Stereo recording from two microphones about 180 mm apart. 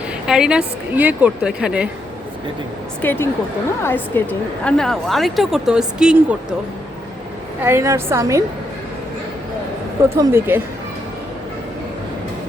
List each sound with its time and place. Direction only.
0.3 s a woman's voice: 5° right (ahead or behind)
3.0 s a woman's voice: 10° left (ahead or behind)
7.6 s a woman's voice: 15° right (ahead or behind)
10.2 s a woman's voice: 15° right (ahead or behind)